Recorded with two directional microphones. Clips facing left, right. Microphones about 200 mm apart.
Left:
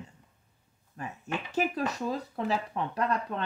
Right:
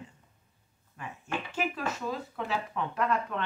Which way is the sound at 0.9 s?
40° left (ahead or behind).